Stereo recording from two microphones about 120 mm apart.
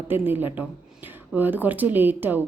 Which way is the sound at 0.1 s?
15° right (ahead or behind).